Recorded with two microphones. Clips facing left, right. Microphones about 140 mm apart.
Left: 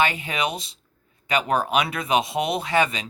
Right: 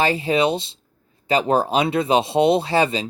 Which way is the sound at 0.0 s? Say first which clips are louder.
Right 5 dB; 30° right (ahead or behind).